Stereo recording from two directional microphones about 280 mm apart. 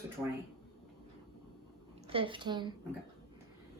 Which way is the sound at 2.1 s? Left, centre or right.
Centre.